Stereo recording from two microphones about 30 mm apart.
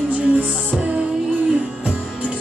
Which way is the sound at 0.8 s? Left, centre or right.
Right.